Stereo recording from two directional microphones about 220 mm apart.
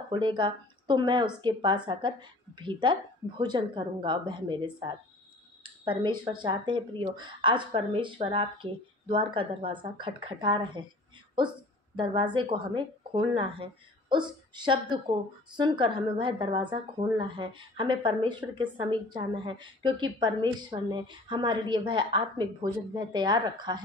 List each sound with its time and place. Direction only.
0.1 s a woman's voice: 20° right (ahead or behind)